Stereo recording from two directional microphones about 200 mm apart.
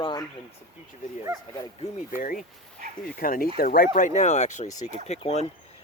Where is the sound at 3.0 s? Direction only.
45° left (ahead or behind).